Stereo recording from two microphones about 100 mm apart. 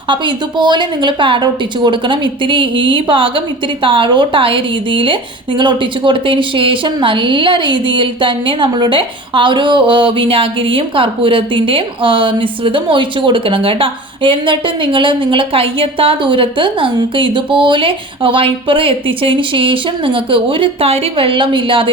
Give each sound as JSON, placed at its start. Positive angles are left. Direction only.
{"t": 0.1, "sound": "a woman's voice", "side_deg": -50}